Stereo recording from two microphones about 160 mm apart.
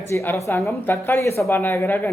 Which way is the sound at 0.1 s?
15° left (ahead or behind).